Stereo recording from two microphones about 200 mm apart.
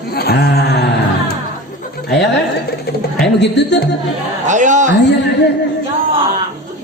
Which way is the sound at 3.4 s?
60° left (ahead or behind).